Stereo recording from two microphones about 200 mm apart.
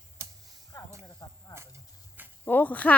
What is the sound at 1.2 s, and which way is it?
Snake, 15° left (ahead or behind).